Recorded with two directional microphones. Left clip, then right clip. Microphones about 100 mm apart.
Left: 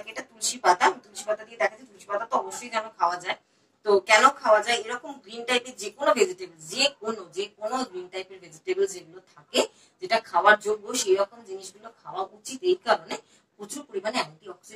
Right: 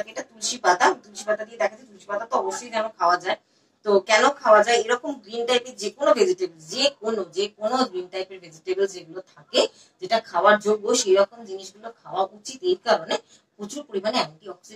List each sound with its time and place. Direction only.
0.0 s speech: 35° right (ahead or behind)